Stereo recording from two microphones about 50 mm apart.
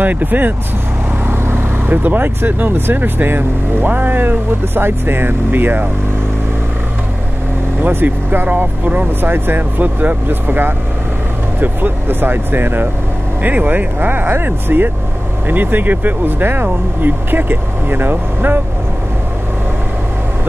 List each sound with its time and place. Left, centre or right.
0.0 s speech: right
7.8 s speech: right